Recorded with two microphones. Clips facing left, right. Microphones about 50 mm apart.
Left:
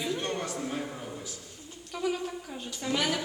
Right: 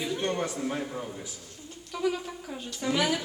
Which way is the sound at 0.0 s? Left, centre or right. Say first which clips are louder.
Right 2 dB; centre.